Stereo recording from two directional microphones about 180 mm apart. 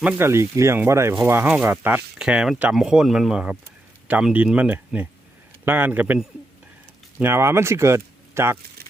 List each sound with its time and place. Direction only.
0.0 s speech: 15° right (ahead or behind)